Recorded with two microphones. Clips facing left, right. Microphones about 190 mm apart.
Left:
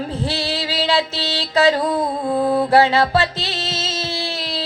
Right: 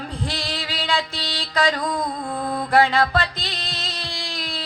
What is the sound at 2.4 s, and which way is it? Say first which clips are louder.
Mantra: left 9 dB; 5° left (ahead or behind).